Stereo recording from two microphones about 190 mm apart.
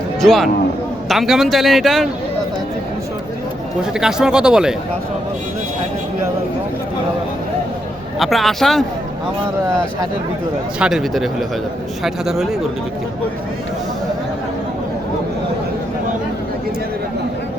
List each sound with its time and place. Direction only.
0.2 s a man's voice: centre (ahead or behind)
3.9 s a man's voice: 5° right (ahead or behind)
8.2 s a man's voice: centre (ahead or behind)
9.6 s speech: 15° right (ahead or behind)
10.8 s a man's voice: 5° right (ahead or behind)